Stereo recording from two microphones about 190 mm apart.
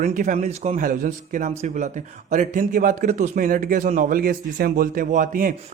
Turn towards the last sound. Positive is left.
turn(degrees=-45)  # may be behind; listen again after turning